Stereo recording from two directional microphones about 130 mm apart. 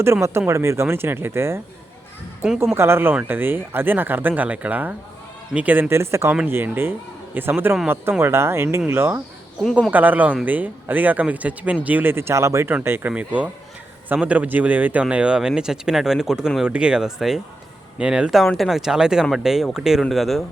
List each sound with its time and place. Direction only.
0.0 s speech: 20° right (ahead or behind)
2.7 s speech: 20° right (ahead or behind); by 20.4 s centre (ahead or behind)